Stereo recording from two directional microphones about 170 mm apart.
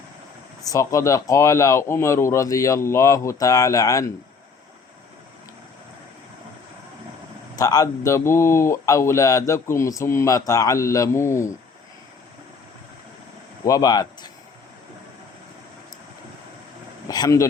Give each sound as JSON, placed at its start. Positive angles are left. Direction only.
{"t": 0.6, "sound": "speech", "side_deg": 20}
{"t": 7.5, "sound": "speech", "side_deg": 20}
{"t": 13.7, "sound": "speech", "side_deg": 20}
{"t": 17.1, "sound": "speech", "side_deg": 20}